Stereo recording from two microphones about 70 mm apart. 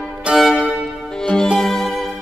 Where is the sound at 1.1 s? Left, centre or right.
Centre.